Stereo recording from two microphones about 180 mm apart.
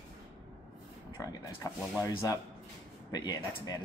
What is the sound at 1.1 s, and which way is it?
Speech, 20° left (ahead or behind).